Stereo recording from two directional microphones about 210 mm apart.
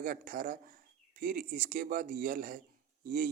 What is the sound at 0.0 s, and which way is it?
Speech, 40° right (ahead or behind).